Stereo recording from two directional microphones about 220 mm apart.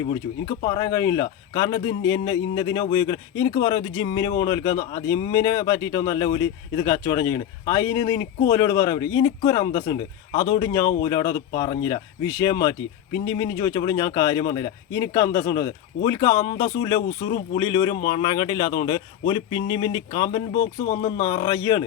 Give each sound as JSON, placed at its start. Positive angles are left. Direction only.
{"t": 0.0, "sound": "speech", "side_deg": 20}